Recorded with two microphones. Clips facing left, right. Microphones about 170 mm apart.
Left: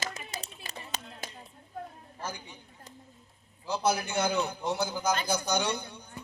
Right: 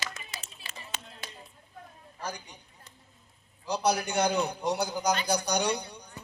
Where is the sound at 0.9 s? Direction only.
35° left (ahead or behind).